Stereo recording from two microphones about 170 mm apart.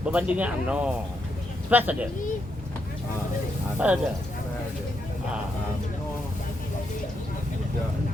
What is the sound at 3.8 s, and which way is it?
Speech, 5° right (ahead or behind).